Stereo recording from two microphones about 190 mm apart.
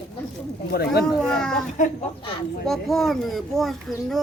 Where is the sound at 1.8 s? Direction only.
40° left (ahead or behind).